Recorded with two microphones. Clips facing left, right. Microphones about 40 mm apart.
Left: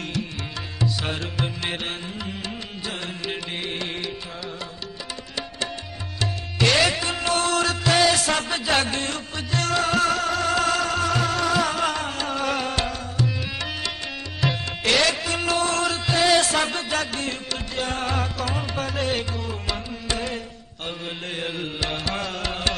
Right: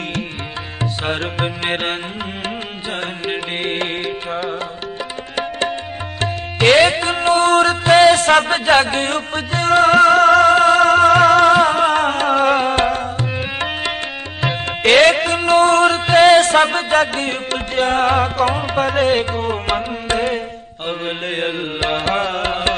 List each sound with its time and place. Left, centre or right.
1.0 s music: right
3.6 s music: right
6.2 s music: right